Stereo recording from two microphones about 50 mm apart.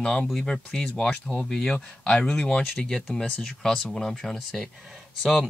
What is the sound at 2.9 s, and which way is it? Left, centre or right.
Speech, centre.